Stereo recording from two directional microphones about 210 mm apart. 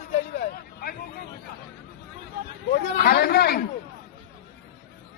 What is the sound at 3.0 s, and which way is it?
Speech, 50° left (ahead or behind).